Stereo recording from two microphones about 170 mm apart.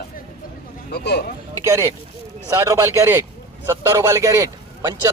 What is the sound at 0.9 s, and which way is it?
Speech, 70° left (ahead or behind).